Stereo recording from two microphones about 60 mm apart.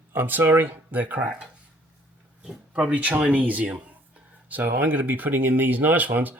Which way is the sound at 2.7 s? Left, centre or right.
Right.